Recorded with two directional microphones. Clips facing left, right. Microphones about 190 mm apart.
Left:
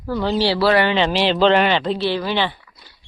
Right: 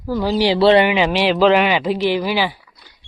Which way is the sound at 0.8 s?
10° right (ahead or behind).